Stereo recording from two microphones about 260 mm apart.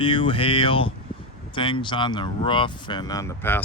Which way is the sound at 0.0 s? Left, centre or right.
Centre.